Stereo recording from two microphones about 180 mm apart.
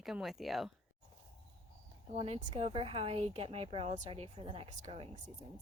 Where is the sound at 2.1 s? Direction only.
35° right (ahead or behind).